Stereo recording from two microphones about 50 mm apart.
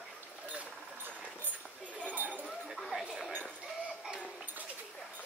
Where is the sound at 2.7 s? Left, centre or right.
Centre.